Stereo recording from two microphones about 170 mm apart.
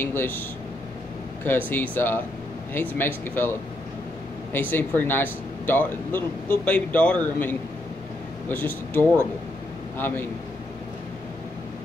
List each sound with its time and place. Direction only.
0.0 s speech: 10° left (ahead or behind)
1.7 s speech: 10° left (ahead or behind)